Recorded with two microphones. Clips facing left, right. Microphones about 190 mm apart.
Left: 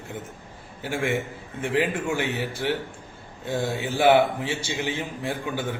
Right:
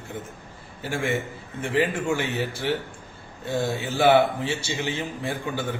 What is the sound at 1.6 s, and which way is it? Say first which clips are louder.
Speech: even; 15° left (ahead or behind).